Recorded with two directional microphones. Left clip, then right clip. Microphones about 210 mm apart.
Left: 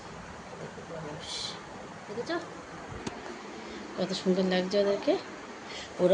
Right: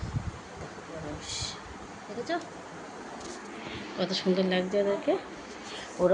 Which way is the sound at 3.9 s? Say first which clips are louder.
Right 1 dB; 10° left (ahead or behind).